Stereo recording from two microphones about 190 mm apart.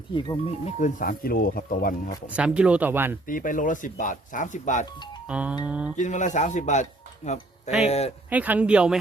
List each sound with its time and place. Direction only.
0.1 s speech: 25° left (ahead or behind)
0.8 s speech: 45° left (ahead or behind)
2.3 s speech: 5° right (ahead or behind)
3.2 s speech: 45° left (ahead or behind)
5.3 s speech: 5° right (ahead or behind)
6.0 s a man's voice: 40° left (ahead or behind)
7.9 s a man's voice: 35° left (ahead or behind)
8.3 s speech: 10° right (ahead or behind)